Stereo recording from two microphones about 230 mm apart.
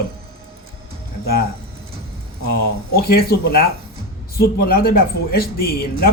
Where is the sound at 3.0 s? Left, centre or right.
Left.